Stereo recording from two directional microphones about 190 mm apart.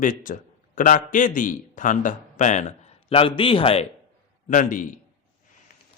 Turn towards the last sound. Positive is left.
turn(degrees=45)  # may be behind; listen again after turning